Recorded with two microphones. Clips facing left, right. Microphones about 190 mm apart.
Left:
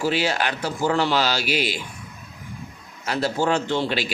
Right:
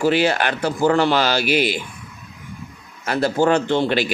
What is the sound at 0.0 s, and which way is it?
Speech, 55° right (ahead or behind).